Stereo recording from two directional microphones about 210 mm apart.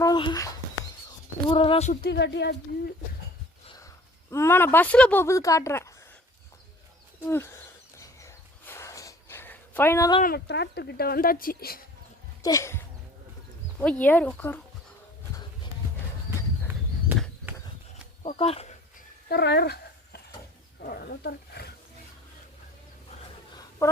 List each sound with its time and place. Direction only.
0.0 s speech: 20° left (ahead or behind)
1.9 s speech: 50° left (ahead or behind)
4.3 s a woman's voice: 10° left (ahead or behind)
7.3 s a woman's voice: 10° left (ahead or behind)
7.9 s a sound: 15° left (ahead or behind)
10.2 s speech: 50° left (ahead or behind)
12.4 s a woman's voice: 15° left (ahead or behind)
18.2 s speech: 30° left (ahead or behind)
19.3 s a sound: 50° left (ahead or behind)
20.8 s roaring cats: 45° left (ahead or behind)